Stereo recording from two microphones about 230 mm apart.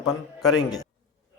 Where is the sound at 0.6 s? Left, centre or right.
Centre.